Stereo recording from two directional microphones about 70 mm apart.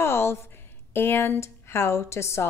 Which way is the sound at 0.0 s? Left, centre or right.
Left.